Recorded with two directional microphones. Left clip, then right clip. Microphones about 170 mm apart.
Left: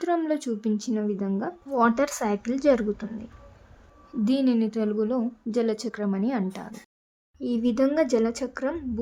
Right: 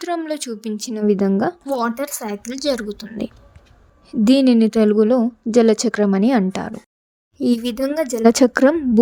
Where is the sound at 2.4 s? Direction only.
50° right (ahead or behind).